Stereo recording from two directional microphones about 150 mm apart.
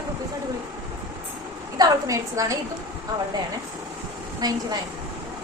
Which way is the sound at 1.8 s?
20° right (ahead or behind).